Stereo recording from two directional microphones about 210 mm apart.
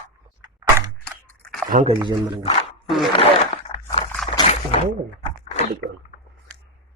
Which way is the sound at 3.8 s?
5° left (ahead or behind).